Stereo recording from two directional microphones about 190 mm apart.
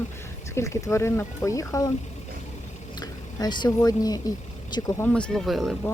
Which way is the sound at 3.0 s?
20° left (ahead or behind).